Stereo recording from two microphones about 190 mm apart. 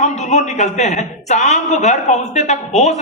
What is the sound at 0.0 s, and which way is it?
A man's voice, 35° left (ahead or behind).